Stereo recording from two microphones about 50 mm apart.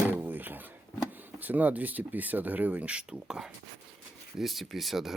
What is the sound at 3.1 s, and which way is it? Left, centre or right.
Speech, centre.